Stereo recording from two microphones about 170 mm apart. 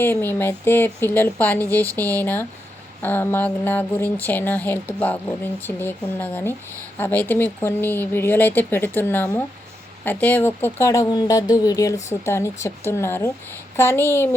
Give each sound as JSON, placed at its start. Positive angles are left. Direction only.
{"t": 0.0, "sound": "speech", "side_deg": 10}